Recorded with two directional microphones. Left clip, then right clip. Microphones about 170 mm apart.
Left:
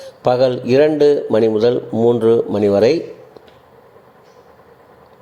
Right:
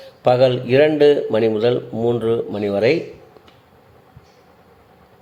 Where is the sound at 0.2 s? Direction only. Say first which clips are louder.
Even; 20° left (ahead or behind).